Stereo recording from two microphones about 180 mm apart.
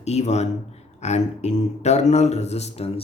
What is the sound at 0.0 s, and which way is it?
Speech, 40° left (ahead or behind).